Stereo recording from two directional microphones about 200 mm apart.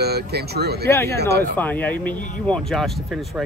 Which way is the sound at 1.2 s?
55° right (ahead or behind).